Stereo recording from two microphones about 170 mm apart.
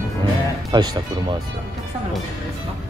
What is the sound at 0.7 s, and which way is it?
Speech, 25° right (ahead or behind).